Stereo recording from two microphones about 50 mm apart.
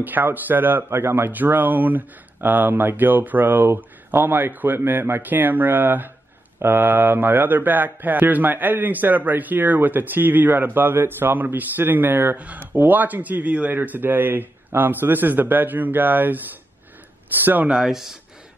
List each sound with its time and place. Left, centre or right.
0.0 s a man's voice: right
1.3 s a man's voice: right
13.7 s a man's voice: right
17.8 s speech: centre